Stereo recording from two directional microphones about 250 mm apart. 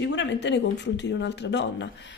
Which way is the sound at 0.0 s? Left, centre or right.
Left.